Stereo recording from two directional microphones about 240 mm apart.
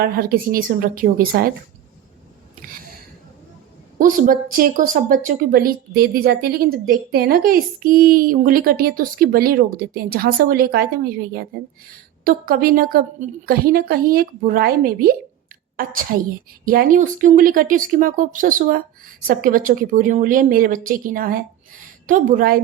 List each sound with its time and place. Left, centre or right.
0.0 s a woman's voice: right
3.9 s a woman's voice: right